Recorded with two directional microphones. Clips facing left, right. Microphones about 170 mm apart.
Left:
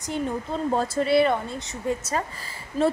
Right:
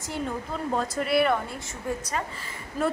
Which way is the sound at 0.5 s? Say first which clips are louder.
Left 5 dB; 30° left (ahead or behind).